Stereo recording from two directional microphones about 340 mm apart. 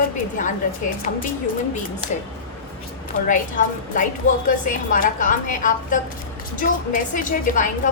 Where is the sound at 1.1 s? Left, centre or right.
Left.